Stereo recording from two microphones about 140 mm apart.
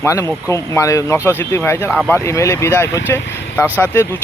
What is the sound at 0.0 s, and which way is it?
Speech, 20° left (ahead or behind).